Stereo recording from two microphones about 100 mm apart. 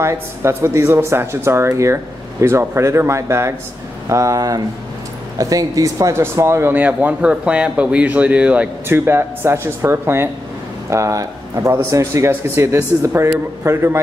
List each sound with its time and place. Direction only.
0.0 s a man's voice: 25° right (ahead or behind)
8.8 s a man's voice: 25° right (ahead or behind)